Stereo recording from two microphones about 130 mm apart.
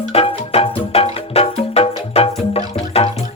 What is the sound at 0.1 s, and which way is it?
Music, 50° left (ahead or behind).